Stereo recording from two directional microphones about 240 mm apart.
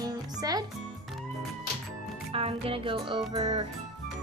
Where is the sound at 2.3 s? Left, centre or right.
Right.